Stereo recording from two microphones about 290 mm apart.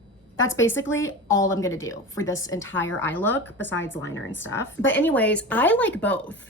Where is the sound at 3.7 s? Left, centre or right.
Left.